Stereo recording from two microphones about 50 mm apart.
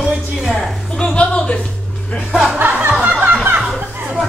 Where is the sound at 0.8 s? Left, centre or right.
Centre.